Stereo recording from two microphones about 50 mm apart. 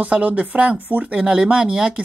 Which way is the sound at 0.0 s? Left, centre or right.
Right.